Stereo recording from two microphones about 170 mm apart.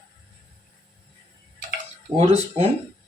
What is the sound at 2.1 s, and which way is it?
Speech, 20° right (ahead or behind).